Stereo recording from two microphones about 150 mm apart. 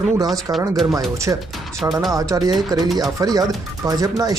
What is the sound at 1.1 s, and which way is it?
Speech, 20° right (ahead or behind).